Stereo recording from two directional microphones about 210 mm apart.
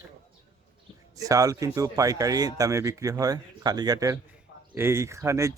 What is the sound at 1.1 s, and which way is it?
Speech, 15° right (ahead or behind).